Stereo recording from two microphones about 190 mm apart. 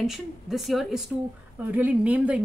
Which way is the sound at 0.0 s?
Centre (ahead or behind).